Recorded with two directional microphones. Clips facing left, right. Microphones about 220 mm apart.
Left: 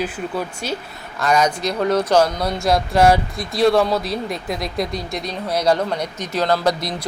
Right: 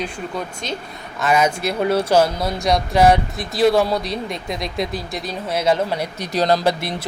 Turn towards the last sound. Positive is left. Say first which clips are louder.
# right 2 dB
turn(degrees=-35)  # may be behind; listen again after turning